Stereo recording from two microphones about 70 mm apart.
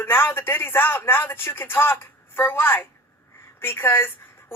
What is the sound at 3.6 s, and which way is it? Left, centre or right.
Speech, left.